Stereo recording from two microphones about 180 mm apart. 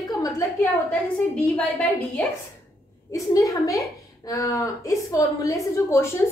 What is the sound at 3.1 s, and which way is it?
A woman's voice, 20° left (ahead or behind).